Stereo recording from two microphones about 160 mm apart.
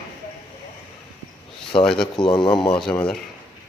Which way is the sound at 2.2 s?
30° left (ahead or behind).